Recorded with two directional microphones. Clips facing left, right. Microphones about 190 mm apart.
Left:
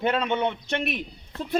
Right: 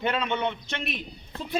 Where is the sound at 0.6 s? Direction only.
60° left (ahead or behind).